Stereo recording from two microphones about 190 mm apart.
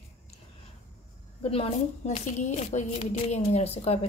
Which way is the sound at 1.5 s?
30° left (ahead or behind).